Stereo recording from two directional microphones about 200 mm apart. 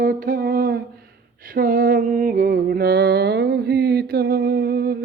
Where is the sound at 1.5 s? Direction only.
45° right (ahead or behind).